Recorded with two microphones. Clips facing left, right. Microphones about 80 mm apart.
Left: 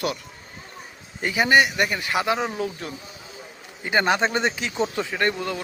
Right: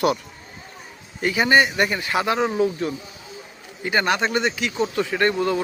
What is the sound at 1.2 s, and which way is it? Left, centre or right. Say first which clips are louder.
Speech: right 1 dB; centre.